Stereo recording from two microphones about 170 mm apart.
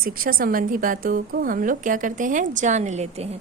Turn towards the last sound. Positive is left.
turn(degrees=-40)  # may be behind; listen again after turning